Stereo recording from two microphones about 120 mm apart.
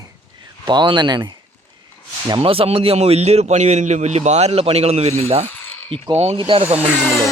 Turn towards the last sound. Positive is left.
turn(degrees=10)  # may be behind; listen again after turning